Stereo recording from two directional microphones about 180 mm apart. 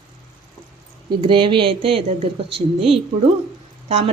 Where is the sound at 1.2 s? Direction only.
25° right (ahead or behind).